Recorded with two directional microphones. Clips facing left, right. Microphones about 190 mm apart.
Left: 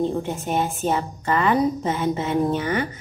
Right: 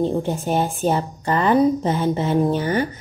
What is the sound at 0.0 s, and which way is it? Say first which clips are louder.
A woman's voice: right 3 dB; 35° right (ahead or behind).